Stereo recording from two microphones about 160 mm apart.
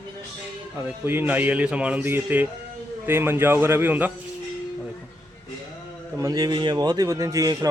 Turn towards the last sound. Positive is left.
turn(degrees=-20)  # may be behind; listen again after turning